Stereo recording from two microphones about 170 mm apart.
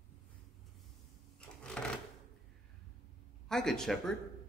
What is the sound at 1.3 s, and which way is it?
Sewing machine, 5° left (ahead or behind).